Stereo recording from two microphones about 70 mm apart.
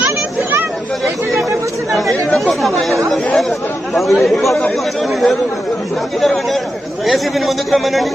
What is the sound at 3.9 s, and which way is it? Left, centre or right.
Speech, centre.